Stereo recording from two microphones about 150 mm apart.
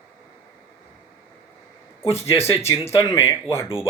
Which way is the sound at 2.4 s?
45° left (ahead or behind).